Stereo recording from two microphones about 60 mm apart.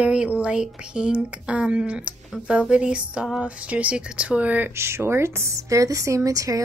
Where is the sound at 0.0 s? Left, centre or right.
Centre.